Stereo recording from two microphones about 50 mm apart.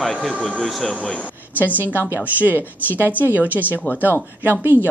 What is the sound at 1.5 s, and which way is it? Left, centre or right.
A woman's voice, right.